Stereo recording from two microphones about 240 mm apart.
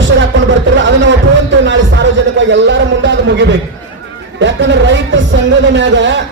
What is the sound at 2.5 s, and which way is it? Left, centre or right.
Speech, right.